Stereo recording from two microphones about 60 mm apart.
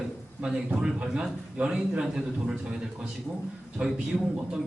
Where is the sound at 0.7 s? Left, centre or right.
Right.